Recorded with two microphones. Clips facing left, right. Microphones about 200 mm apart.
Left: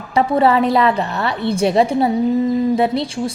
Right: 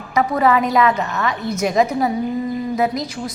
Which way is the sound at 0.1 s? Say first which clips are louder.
Left 2 dB; 30° left (ahead or behind).